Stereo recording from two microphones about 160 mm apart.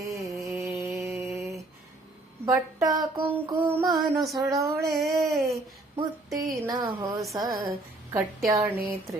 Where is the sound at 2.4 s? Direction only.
20° right (ahead or behind).